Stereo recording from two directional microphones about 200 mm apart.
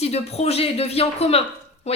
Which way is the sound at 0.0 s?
30° left (ahead or behind).